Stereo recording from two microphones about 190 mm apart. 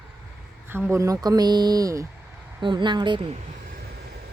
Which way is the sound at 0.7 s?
10° right (ahead or behind).